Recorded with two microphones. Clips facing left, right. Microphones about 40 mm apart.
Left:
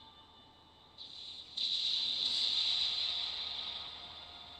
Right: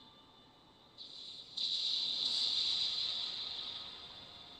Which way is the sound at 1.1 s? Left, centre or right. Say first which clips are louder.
Left 2 dB; left.